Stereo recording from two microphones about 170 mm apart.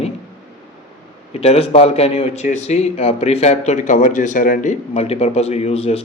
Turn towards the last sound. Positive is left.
turn(degrees=35)  # may be behind; listen again after turning